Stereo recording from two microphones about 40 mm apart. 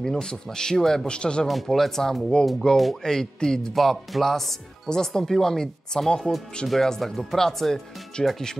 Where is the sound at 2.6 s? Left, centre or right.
Centre.